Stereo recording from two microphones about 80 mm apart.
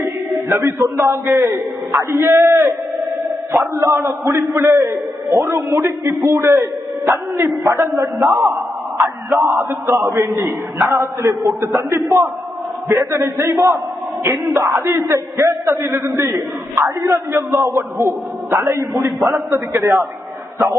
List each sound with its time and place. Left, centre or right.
0.4 s a man's voice: right
8.2 s a man's voice: centre
9.0 s a man's voice: right